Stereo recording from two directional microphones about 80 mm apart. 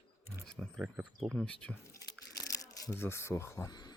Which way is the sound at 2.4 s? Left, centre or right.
Left.